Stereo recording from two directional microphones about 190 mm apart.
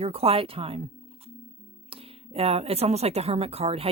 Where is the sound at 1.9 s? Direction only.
30° right (ahead or behind).